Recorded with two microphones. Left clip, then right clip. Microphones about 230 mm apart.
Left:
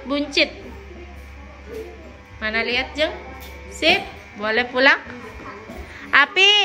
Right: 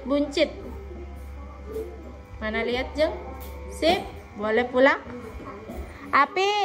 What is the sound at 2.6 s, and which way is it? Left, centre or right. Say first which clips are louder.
Speech: left 3 dB; centre.